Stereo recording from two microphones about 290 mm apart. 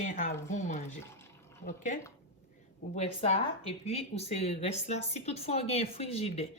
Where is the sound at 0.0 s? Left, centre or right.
Left.